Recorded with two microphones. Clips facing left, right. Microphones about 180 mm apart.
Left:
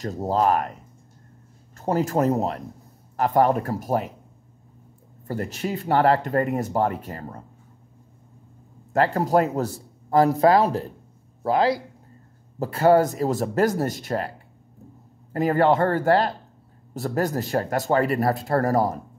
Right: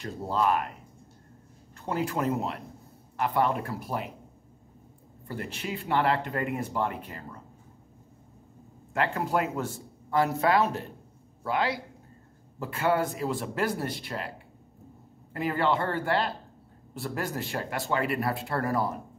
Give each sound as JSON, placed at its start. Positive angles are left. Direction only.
{"t": 0.0, "sound": "speech", "side_deg": 40}
{"t": 1.8, "sound": "speech", "side_deg": 40}
{"t": 5.2, "sound": "speech", "side_deg": 40}
{"t": 8.9, "sound": "speech", "side_deg": 40}
{"t": 15.3, "sound": "speech", "side_deg": 45}